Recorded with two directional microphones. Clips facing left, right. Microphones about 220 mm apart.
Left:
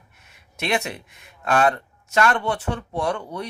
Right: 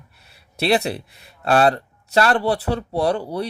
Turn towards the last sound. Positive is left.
turn(degrees=-35)  # may be behind; listen again after turning